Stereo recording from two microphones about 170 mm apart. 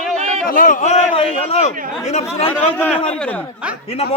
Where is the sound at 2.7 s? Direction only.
5° left (ahead or behind).